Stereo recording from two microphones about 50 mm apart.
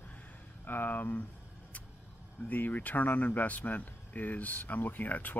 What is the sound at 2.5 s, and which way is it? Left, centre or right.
Speech, left.